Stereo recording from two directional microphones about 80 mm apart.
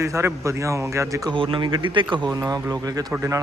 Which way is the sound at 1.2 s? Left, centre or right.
Right.